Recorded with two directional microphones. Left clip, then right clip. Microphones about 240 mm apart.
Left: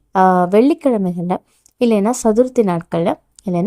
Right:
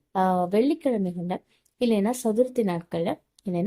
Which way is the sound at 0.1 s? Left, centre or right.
Left.